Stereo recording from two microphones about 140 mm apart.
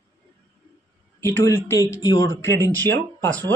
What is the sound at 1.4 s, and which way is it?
Speech, 20° left (ahead or behind).